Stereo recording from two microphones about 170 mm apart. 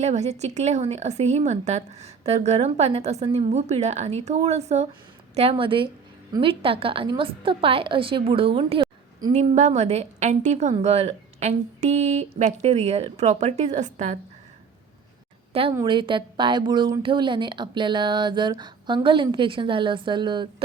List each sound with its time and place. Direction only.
0.0 s a woman's voice: 40° right (ahead or behind)
15.7 s speech: 25° right (ahead or behind)